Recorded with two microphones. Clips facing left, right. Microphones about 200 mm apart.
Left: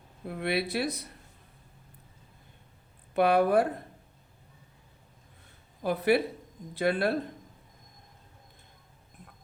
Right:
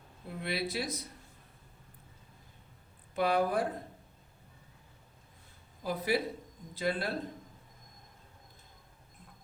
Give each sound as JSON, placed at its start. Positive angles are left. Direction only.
{"t": 0.3, "sound": "speech", "side_deg": 65}
{"t": 3.2, "sound": "speech", "side_deg": 65}
{"t": 5.8, "sound": "speech", "side_deg": 60}